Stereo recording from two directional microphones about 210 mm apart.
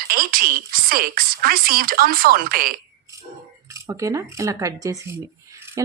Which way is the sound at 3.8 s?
15° right (ahead or behind).